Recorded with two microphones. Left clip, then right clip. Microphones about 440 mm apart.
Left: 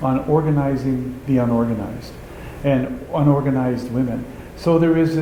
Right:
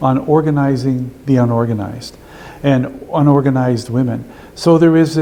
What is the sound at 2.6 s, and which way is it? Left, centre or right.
Speech, right.